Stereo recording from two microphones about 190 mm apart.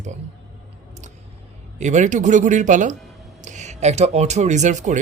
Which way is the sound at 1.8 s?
40° right (ahead or behind).